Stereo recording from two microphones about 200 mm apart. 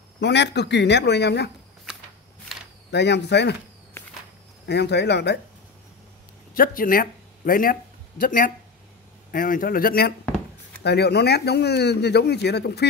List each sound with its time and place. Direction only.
0.2 s a man's voice: 60° left (ahead or behind)
2.9 s a man's voice: 55° left (ahead or behind)
4.6 s a man's voice: 55° left (ahead or behind)
6.5 s a man's voice: 45° left (ahead or behind)